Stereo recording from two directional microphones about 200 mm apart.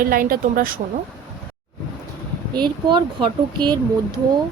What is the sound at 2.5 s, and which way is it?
Speech, 20° right (ahead or behind).